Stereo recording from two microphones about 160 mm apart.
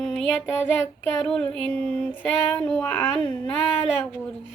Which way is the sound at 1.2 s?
5° left (ahead or behind).